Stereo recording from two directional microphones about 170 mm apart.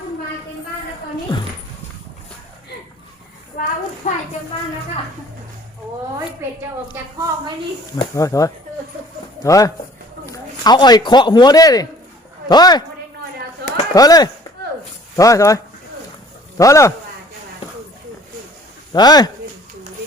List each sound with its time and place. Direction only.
1.3 s dog: 25° left (ahead or behind)
3.6 s a sound: 55° left (ahead or behind)
4.0 s a sound: 45° left (ahead or behind)
6.9 s speech: 20° right (ahead or behind)
7.9 s speech: 20° left (ahead or behind)
13.9 s speech: 20° left (ahead or behind)
18.9 s speech: 25° left (ahead or behind)